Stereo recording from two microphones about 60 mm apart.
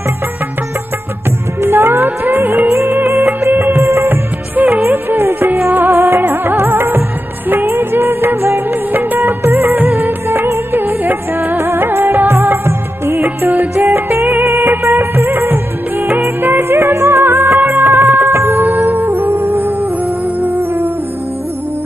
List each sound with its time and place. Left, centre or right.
1.6 s music: right
3.9 s music of bollywood: right
13.2 s music: right
14.8 s music of bollywood: right
20.3 s music: right